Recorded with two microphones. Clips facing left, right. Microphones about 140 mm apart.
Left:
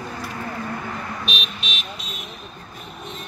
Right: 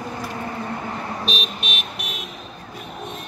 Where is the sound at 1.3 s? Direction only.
45° right (ahead or behind).